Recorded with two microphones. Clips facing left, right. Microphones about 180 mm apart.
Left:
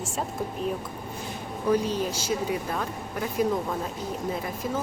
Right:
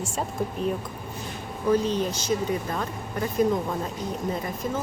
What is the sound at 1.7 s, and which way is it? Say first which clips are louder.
A woman's voice: right 2 dB; 10° left (ahead or behind).